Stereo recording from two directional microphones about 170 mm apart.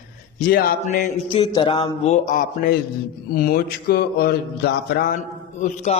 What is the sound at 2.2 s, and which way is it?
Speech, 55° left (ahead or behind).